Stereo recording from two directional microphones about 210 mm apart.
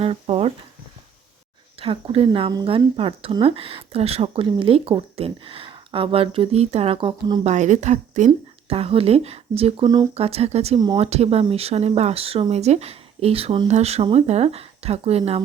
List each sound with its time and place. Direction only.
0.0 s a sound: 30° right (ahead or behind)
1.8 s speech: 25° right (ahead or behind)
7.4 s speech: 35° right (ahead or behind)
10.8 s speech: 20° right (ahead or behind)
11.0 s speech: 30° right (ahead or behind)